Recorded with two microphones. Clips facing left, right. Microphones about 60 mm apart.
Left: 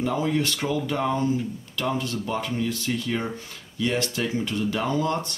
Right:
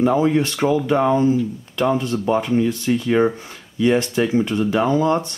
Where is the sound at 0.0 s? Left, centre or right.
Right.